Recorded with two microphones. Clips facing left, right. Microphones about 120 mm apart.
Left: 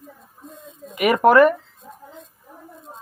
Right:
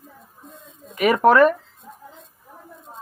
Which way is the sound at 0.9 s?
15° left (ahead or behind).